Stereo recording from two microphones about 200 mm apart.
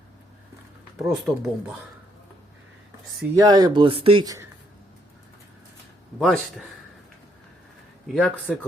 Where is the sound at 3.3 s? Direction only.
20° right (ahead or behind).